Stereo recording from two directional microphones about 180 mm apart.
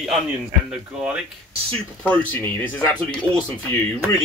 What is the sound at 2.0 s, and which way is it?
Speech, 10° left (ahead or behind).